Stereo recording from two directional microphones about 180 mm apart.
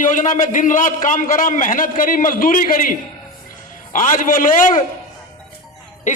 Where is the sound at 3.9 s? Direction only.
45° left (ahead or behind).